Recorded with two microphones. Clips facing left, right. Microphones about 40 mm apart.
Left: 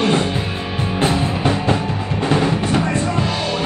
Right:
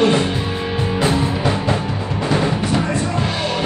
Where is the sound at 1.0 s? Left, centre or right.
Left.